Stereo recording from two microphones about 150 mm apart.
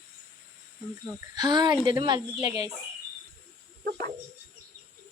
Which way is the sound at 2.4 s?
45° left (ahead or behind).